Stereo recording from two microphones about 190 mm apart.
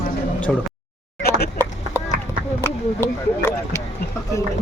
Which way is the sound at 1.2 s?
55° left (ahead or behind).